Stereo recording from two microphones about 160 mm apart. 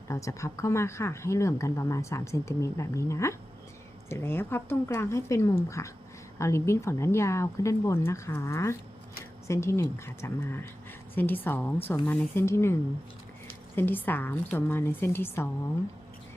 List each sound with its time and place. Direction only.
0.1 s speech: 20° left (ahead or behind)
13.7 s speech: 10° left (ahead or behind)